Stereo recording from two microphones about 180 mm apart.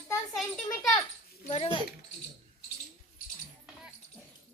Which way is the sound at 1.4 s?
35° left (ahead or behind).